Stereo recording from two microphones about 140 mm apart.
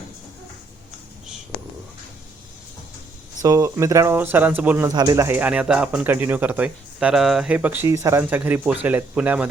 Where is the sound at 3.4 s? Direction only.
25° right (ahead or behind).